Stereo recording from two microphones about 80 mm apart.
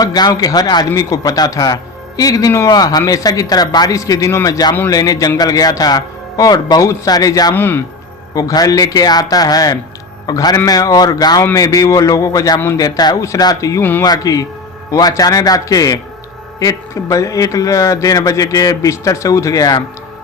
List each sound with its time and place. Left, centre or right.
0.0 s speech: left
3.9 s speech: left
7.5 s a man's voice: left
8.4 s speech: left
13.1 s speech: left